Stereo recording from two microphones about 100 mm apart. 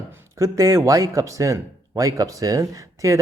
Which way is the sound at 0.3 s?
35° right (ahead or behind).